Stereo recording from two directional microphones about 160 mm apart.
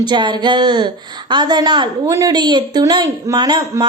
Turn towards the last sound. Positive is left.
turn(degrees=-25)  # may be behind; listen again after turning